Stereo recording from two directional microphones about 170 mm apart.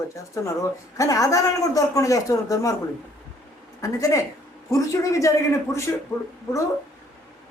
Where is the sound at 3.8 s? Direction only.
20° left (ahead or behind).